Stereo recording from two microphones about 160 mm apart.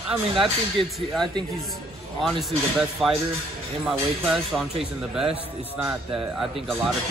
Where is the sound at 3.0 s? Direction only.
Centre (ahead or behind).